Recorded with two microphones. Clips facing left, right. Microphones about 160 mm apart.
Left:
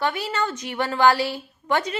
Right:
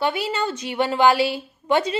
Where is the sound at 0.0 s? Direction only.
25° right (ahead or behind).